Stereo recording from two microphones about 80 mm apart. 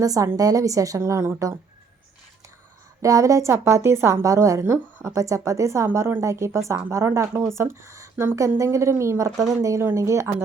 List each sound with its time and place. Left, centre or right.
0.0 s a woman's voice: right
3.0 s a woman's voice: right